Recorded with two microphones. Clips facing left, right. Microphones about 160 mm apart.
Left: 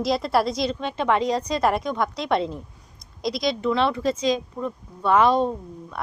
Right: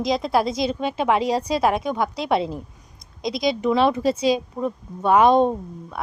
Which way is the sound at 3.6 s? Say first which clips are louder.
Right 4 dB; 15° right (ahead or behind).